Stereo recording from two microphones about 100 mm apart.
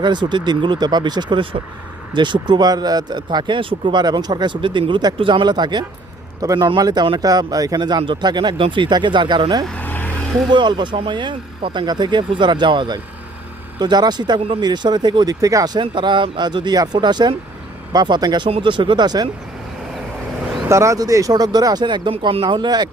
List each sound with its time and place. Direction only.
0.0 s speech: 50° right (ahead or behind)
6.4 s speech: 35° right (ahead or behind)
9.7 s vehicle: 15° left (ahead or behind)
10.5 s speech: 50° right (ahead or behind)
18.4 s speech: 55° right (ahead or behind)
20.7 s speech: 30° right (ahead or behind); by 22.1 s 50° right (ahead or behind)
22.1 s speech: 70° right (ahead or behind); by 22.9 s 45° right (ahead or behind)